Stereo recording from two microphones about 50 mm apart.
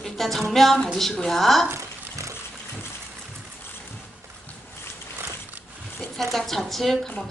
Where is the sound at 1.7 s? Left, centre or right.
Right.